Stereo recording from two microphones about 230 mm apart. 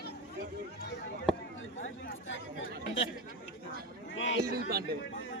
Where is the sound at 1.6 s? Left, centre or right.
Left.